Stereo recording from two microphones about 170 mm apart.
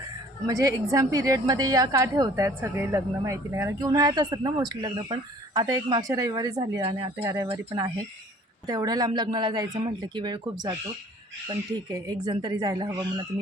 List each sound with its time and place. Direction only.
0.4 s a woman's voice: 20° right (ahead or behind)
11.9 s a woman's voice: 25° right (ahead or behind)